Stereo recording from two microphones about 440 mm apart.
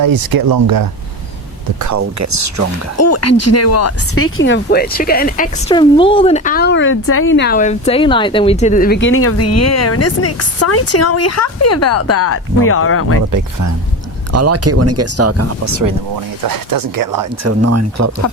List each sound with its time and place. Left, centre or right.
0.0 s speech: right
1.8 s speech: right
3.0 s speech: left
13.3 s speech: right
17.6 s speech: right